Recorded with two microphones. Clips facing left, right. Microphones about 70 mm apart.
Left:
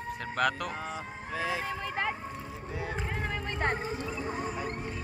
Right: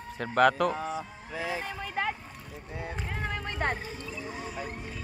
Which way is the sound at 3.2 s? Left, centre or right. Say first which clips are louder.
Right 2 dB; centre.